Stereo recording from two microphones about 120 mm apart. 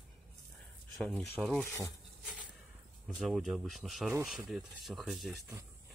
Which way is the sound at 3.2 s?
Centre (ahead or behind).